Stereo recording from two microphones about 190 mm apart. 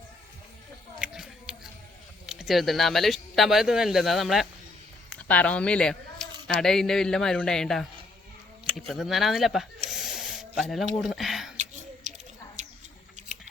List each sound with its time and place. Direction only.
0.9 s a sound: 5° right (ahead or behind)
2.2 s speech: 5° right (ahead or behind)
8.9 s speech: centre (ahead or behind)
9.9 s spray: centre (ahead or behind)
11.5 s a sound: 40° right (ahead or behind)
12.6 s rodents: 40° right (ahead or behind)